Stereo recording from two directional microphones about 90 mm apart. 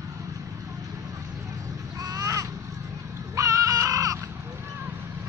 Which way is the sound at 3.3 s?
40° right (ahead or behind).